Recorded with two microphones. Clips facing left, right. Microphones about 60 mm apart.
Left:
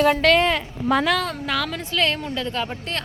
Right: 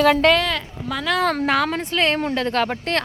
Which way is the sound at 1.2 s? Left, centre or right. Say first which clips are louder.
Right 8 dB; right.